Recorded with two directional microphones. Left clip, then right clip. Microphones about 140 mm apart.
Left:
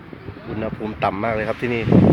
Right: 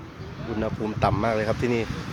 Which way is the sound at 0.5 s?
5° right (ahead or behind).